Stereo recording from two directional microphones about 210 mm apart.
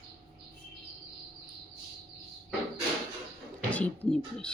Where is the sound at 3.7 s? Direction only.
5° left (ahead or behind).